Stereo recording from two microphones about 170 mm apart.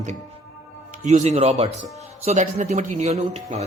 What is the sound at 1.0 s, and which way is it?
Speech, 45° right (ahead or behind).